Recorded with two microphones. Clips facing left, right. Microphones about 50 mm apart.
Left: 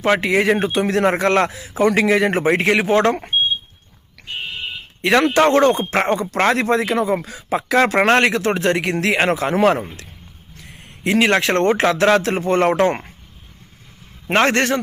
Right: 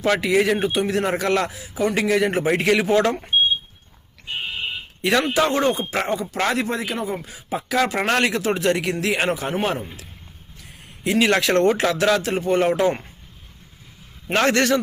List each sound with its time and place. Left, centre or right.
0.2 s a man's voice: left
0.6 s speech: left
1.5 s a man's voice: left
5.2 s speech: left
6.3 s speech: left
7.9 s a man's voice: left
10.6 s a man's voice: left
14.3 s a man's voice: left